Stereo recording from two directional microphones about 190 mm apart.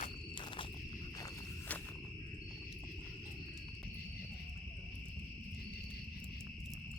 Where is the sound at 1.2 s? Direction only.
10° left (ahead or behind).